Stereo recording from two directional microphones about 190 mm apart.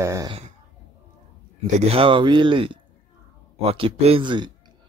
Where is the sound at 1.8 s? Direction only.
30° right (ahead or behind).